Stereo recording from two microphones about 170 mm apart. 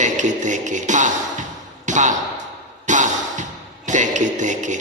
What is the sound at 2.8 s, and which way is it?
Music, 45° right (ahead or behind).